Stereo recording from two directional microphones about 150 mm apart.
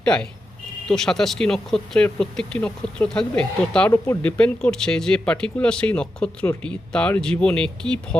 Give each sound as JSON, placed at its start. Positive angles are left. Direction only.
{"t": 0.0, "sound": "speech", "side_deg": 5}
{"t": 3.9, "sound": "speech", "side_deg": 20}
{"t": 4.2, "sound": "speech", "side_deg": 10}